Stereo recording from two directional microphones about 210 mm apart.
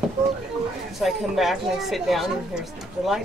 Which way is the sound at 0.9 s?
Centre (ahead or behind).